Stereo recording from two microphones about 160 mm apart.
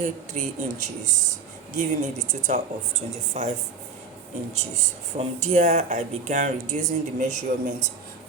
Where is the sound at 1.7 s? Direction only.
45° right (ahead or behind).